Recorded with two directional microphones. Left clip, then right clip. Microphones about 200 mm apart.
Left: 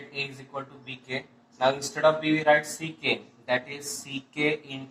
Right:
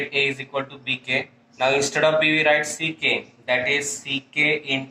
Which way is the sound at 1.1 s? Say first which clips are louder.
Right 10 dB; 40° right (ahead or behind).